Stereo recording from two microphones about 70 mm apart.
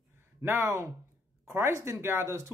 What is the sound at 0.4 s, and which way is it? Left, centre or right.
Speech, right.